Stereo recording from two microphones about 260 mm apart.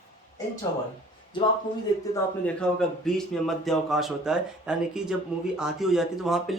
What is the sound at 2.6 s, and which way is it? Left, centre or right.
Speech, centre.